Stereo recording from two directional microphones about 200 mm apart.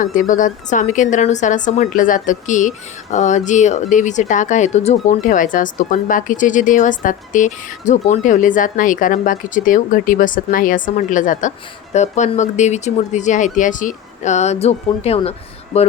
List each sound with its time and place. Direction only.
0.0 s speech: 40° left (ahead or behind)